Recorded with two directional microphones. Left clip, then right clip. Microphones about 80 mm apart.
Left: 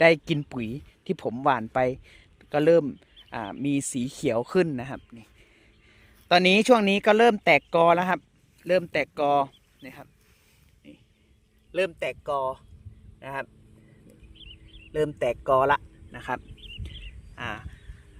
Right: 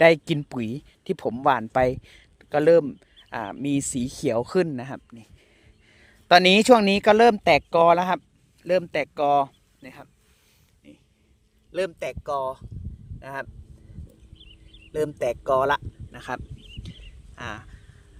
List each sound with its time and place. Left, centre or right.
0.0 s speech: centre
0.5 s speech: right
3.8 s speech: centre
4.5 s speech: centre
5.1 s a sound: centre
5.9 s a sound: right
6.2 s speech: right
6.5 s speech: right
6.8 s speech: right; by 10.1 s centre
10.8 s a sound: centre
11.7 s speech: centre
15.2 s speech: centre
16.6 s a sound: right
17.3 s speech: centre